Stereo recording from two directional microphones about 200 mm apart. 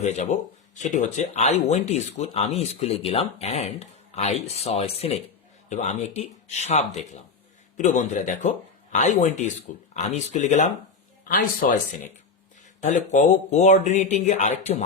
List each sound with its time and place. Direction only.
0.0 s speech: 35° left (ahead or behind)
12.8 s speech: 35° left (ahead or behind)